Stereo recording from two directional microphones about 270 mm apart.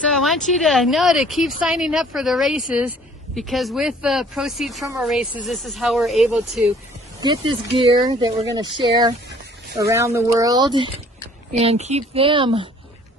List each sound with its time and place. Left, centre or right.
0.1 s speech: centre
7.2 s a woman's voice: centre